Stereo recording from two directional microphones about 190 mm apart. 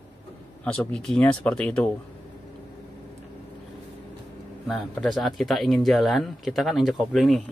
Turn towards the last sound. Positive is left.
turn(degrees=0)  # may be behind; listen again after turning